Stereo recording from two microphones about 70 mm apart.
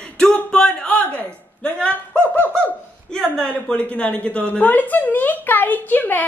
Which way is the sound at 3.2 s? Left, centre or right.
Centre.